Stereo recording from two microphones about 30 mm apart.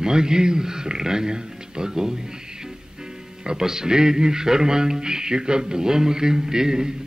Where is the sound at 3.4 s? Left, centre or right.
Right.